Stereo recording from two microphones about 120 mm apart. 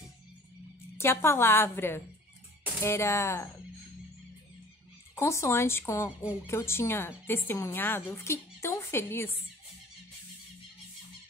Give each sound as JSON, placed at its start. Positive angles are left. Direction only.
{"t": 0.9, "sound": "a woman's voice", "side_deg": 20}
{"t": 5.1, "sound": "a woman's voice", "side_deg": 25}